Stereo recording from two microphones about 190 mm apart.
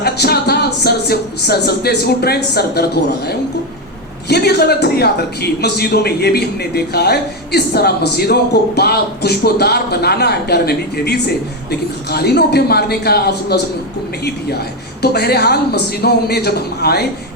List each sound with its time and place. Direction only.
0.0 s a man's voice: 55° left (ahead or behind)
15.0 s a man's voice: 55° left (ahead or behind)